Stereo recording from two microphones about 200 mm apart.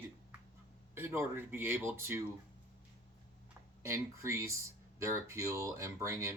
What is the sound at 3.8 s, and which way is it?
Speech, 15° right (ahead or behind).